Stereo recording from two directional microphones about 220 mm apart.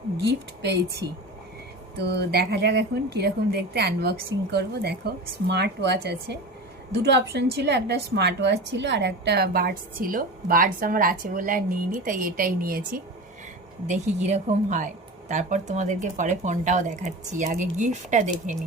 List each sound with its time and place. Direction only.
0.3 s a woman's voice: 50° right (ahead or behind)
13.8 s speech: 30° right (ahead or behind)